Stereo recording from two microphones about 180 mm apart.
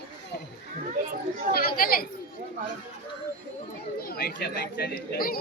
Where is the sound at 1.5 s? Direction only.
55° left (ahead or behind).